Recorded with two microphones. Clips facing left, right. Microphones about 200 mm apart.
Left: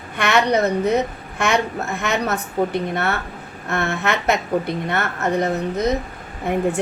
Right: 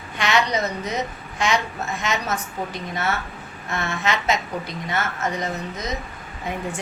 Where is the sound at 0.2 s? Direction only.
60° left (ahead or behind).